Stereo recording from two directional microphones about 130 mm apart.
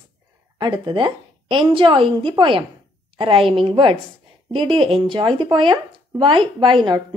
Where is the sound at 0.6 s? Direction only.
40° right (ahead or behind).